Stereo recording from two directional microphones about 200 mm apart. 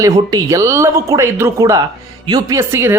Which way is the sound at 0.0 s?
20° right (ahead or behind).